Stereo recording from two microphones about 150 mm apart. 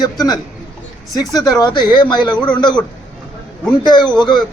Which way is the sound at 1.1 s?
25° left (ahead or behind).